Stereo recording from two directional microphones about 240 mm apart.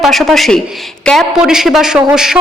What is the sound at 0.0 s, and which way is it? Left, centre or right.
A man's voice, centre.